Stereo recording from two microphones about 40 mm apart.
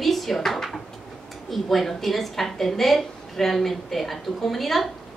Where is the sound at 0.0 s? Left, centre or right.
Centre.